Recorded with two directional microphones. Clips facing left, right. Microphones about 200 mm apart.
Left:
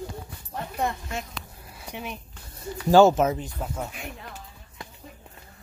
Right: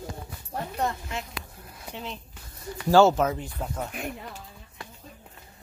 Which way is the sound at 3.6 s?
5° left (ahead or behind).